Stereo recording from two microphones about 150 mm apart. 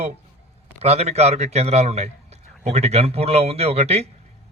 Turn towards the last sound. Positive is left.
turn(degrees=-45)  # may be behind; listen again after turning